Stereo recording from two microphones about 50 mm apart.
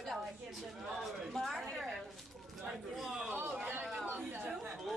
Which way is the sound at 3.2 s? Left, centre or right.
Right.